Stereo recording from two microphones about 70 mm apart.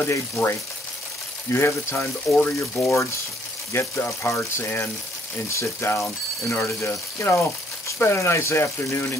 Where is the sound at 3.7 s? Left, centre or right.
Left.